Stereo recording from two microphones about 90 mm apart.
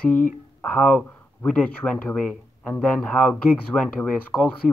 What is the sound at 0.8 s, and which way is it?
Speech, 15° left (ahead or behind).